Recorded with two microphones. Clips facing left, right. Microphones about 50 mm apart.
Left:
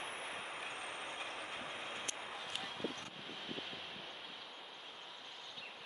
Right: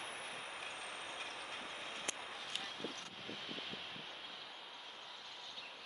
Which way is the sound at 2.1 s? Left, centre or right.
Centre.